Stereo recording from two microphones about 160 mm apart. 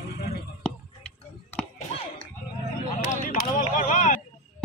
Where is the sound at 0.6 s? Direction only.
5° left (ahead or behind).